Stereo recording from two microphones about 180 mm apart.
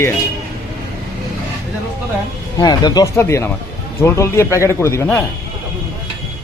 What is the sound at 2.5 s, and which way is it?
Speech, 20° left (ahead or behind).